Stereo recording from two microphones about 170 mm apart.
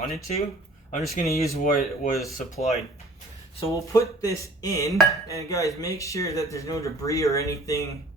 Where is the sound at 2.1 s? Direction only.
Centre (ahead or behind).